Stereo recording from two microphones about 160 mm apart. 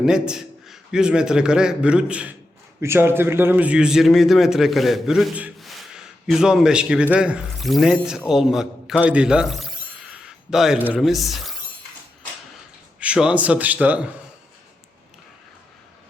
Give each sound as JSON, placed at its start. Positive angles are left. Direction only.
{"t": 0.0, "sound": "a man's voice", "side_deg": -5}
{"t": 13.0, "sound": "a man's voice", "side_deg": -5}